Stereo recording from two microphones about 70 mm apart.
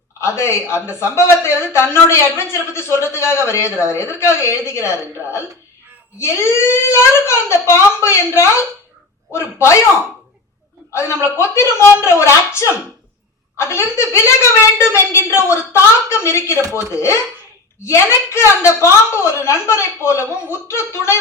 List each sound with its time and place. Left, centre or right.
0.2 s a woman's voice: left
10.9 s a woman's voice: left